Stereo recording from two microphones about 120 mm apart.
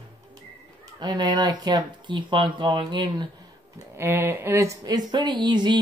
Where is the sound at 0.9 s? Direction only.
35° right (ahead or behind).